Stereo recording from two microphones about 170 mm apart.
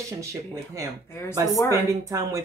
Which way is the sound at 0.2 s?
20° right (ahead or behind).